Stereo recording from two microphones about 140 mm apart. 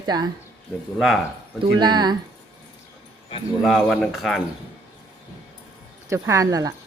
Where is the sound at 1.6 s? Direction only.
30° right (ahead or behind).